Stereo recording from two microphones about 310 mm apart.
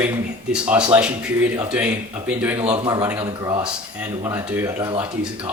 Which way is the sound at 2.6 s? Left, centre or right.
Centre.